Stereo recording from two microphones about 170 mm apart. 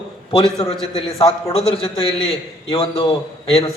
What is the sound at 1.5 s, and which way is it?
A man's voice, 30° left (ahead or behind).